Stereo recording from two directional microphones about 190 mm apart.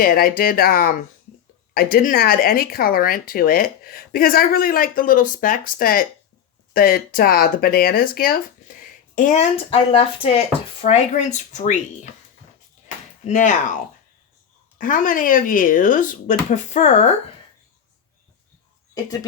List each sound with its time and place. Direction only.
0.0 s speech: 50° left (ahead or behind)
13.2 s speech: 40° left (ahead or behind)
14.8 s speech: 45° left (ahead or behind)